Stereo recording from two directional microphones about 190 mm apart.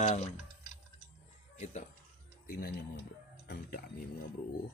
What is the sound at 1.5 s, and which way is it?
Music, 40° left (ahead or behind).